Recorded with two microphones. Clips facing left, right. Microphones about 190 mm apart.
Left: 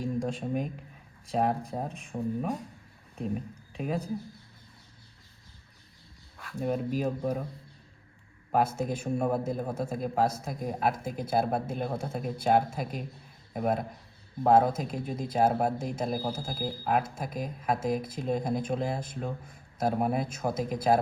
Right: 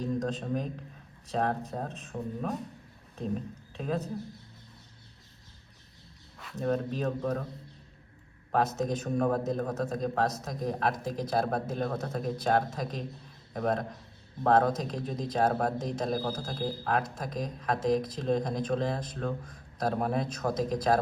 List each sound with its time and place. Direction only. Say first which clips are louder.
0.2 s speech: left 1 dB; 10° left (ahead or behind)
6.6 s speech: left 1 dB; 10° left (ahead or behind)
8.8 s speech: right 1 dB; 10° left (ahead or behind)
20.4 s speech: even; 20° left (ahead or behind)